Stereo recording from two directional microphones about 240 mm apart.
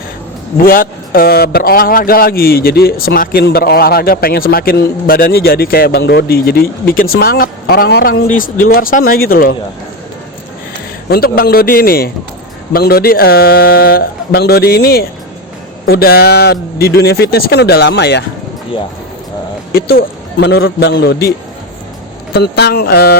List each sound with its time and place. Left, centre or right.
0.5 s a man's voice: left
11.1 s a man's voice: left
19.7 s a man's voice: left